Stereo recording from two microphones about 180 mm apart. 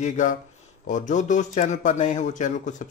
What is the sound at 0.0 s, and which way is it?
A man's voice, 45° left (ahead or behind).